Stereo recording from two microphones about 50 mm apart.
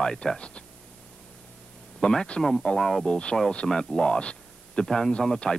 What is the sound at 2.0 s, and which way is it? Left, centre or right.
Speech, centre.